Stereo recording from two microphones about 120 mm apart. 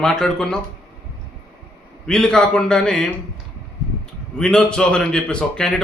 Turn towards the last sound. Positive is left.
turn(degrees=5)  # may be behind; listen again after turning